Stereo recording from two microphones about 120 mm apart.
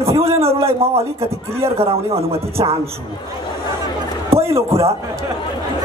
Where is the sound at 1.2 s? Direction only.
20° right (ahead or behind).